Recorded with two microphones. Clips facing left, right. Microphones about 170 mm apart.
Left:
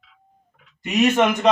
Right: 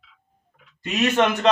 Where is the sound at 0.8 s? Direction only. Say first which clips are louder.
Left 3 dB; 15° left (ahead or behind).